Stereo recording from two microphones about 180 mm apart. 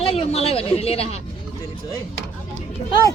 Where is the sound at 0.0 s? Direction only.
35° left (ahead or behind).